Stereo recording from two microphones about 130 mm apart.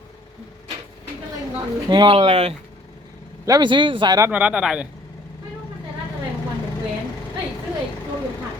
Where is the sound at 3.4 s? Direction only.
30° right (ahead or behind).